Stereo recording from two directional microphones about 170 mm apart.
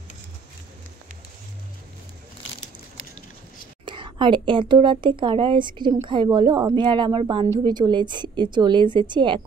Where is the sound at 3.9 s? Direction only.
30° right (ahead or behind).